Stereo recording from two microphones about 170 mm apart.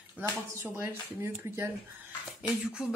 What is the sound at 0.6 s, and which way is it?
Speech, 15° right (ahead or behind).